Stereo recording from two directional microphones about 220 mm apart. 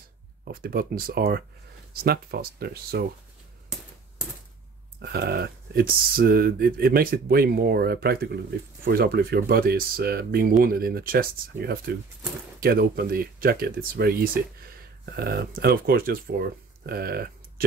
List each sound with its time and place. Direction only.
0.5 s speech: 40° right (ahead or behind)
5.0 s speech: 45° right (ahead or behind)